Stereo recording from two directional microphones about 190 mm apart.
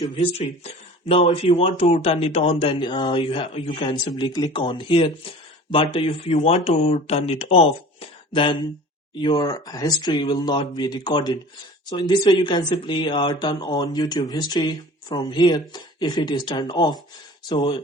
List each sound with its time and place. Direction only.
0.0 s speech: 30° left (ahead or behind)